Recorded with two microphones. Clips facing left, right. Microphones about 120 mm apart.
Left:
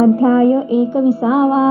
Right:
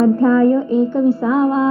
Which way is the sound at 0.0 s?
10° left (ahead or behind).